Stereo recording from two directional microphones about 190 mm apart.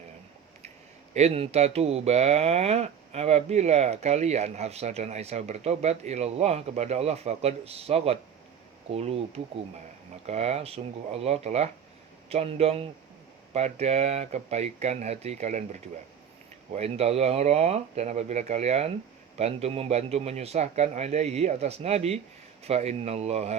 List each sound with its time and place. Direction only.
1.1 s speech: 35° right (ahead or behind)